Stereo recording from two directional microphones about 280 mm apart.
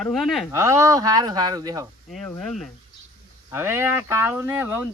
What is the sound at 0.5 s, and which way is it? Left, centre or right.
Speech, centre.